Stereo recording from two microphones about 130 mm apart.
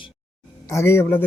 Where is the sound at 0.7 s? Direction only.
20° left (ahead or behind).